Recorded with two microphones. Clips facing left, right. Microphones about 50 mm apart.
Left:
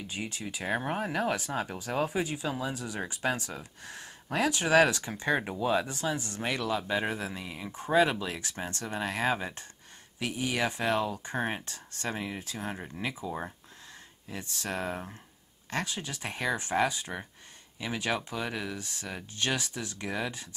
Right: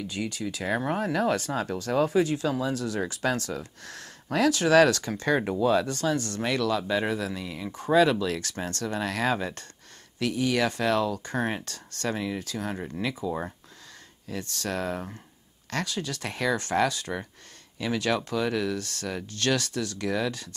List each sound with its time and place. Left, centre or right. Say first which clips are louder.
0.1 s speech: right 5 dB; left
12.7 s speech: right 6 dB; centre
13.2 s speech: right 8 dB; left
14.3 s speech: right 4 dB; centre